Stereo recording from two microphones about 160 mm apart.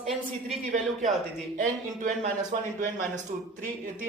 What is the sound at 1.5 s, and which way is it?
Speech, 55° right (ahead or behind).